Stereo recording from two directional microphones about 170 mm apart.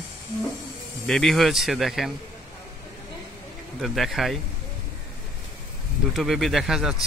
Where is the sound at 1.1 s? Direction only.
Centre (ahead or behind).